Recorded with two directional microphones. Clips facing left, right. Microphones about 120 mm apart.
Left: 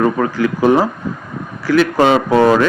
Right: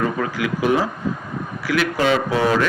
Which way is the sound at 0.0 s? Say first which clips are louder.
Left 7 dB; 40° left (ahead or behind).